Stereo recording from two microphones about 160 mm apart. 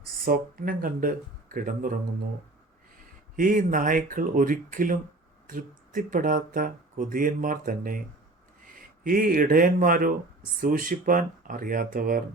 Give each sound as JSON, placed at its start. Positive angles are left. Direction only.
{"t": 0.3, "sound": "speech", "side_deg": -65}
{"t": 3.3, "sound": "speech", "side_deg": -60}